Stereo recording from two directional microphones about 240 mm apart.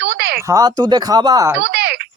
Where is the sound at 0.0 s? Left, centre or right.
Right.